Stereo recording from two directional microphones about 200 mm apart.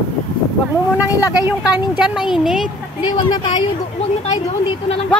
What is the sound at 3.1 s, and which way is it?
Speech, 20° left (ahead or behind).